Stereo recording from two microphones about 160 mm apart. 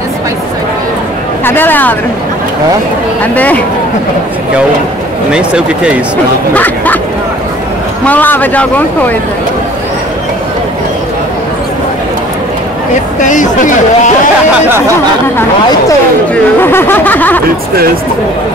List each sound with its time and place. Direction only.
1.4 s a man's voice: 15° left (ahead or behind)
3.3 s a man's voice: 10° left (ahead or behind)
5.3 s speech: 5° right (ahead or behind)
6.5 s speech: 10° left (ahead or behind)
8.0 s a man's voice: 10° left (ahead or behind)
13.2 s speech: 55° left (ahead or behind)
16.6 s a man's voice: 15° left (ahead or behind)